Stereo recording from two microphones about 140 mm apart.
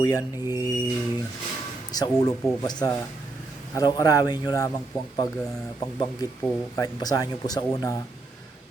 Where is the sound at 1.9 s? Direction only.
25° left (ahead or behind).